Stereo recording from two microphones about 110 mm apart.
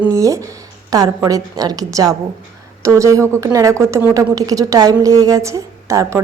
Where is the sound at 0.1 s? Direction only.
30° right (ahead or behind).